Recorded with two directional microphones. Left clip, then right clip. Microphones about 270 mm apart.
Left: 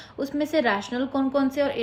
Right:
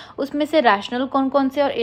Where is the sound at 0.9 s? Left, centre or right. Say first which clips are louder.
Right 6 dB; right.